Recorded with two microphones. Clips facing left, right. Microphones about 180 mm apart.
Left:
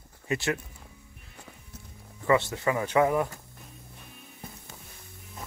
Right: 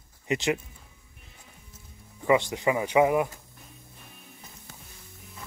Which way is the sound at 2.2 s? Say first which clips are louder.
Right 1 dB; 15° right (ahead or behind).